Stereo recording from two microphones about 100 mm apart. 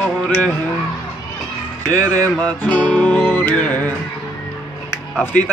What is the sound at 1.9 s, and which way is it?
Speech, 20° left (ahead or behind).